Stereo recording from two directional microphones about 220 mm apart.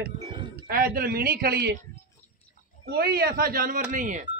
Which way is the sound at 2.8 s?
45° right (ahead or behind).